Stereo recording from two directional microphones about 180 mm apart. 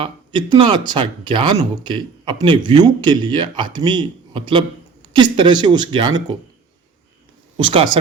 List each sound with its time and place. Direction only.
0.0 s speech: 25° right (ahead or behind)